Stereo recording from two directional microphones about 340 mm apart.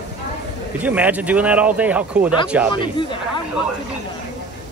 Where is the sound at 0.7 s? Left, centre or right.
Centre.